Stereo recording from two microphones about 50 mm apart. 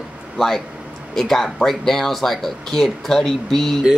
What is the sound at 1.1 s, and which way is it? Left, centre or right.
Speech, centre.